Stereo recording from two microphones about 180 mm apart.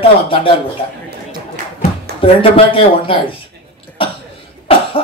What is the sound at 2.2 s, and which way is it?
Speech, 30° left (ahead or behind).